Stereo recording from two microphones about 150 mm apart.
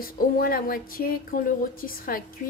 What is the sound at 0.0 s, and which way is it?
Speech, 75° left (ahead or behind).